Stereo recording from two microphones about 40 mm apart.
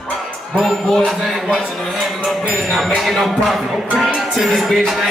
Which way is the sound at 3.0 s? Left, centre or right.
Centre.